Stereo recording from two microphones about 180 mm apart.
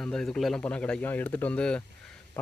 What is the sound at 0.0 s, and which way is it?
A man's voice, 5° left (ahead or behind).